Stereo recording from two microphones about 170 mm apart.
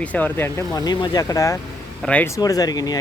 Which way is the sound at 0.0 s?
10° left (ahead or behind).